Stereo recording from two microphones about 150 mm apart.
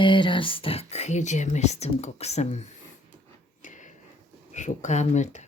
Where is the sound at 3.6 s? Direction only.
55° left (ahead or behind).